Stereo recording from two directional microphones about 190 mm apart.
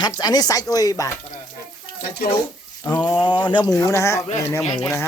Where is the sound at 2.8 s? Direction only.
20° left (ahead or behind).